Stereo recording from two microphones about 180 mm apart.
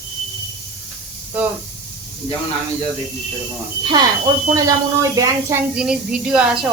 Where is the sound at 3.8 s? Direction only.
25° right (ahead or behind).